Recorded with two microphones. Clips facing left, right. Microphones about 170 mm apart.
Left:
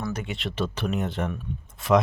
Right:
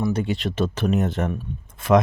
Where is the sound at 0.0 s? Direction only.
30° right (ahead or behind).